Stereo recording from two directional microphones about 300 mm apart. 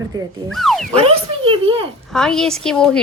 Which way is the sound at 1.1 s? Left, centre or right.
Centre.